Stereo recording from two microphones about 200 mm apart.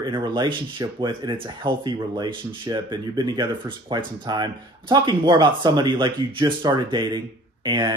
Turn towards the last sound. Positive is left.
turn(degrees=-20)  # may be behind; listen again after turning